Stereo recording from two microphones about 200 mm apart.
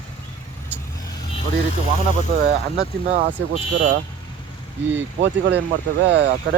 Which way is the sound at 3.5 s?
40° right (ahead or behind).